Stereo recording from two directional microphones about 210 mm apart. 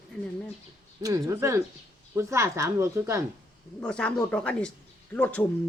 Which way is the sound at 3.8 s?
5° left (ahead or behind).